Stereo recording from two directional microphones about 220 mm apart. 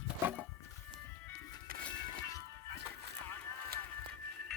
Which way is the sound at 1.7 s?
40° right (ahead or behind).